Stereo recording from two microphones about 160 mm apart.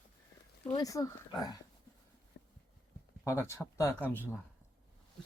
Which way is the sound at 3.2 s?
20° left (ahead or behind).